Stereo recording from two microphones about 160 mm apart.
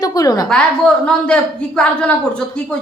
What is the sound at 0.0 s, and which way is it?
Speech, 20° left (ahead or behind).